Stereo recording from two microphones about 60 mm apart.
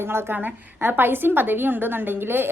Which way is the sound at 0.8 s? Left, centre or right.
Right.